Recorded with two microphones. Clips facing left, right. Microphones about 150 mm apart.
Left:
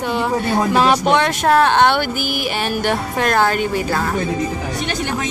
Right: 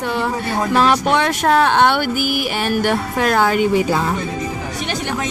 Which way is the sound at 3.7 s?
15° right (ahead or behind).